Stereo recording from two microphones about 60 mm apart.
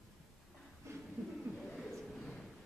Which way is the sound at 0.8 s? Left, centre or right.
Right.